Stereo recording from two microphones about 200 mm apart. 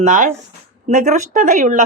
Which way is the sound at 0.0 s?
40° right (ahead or behind).